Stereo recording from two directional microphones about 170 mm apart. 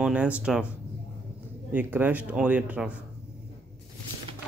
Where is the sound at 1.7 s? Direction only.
10° right (ahead or behind).